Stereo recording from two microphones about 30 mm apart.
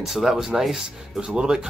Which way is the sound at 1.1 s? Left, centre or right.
Right.